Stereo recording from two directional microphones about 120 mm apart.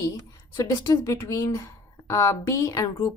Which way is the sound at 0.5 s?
25° left (ahead or behind).